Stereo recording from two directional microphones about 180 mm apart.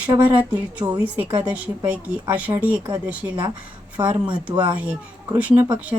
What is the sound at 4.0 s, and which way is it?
Speech, 20° right (ahead or behind).